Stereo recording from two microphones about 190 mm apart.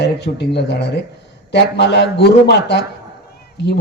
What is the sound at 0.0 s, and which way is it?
Speech, 65° left (ahead or behind).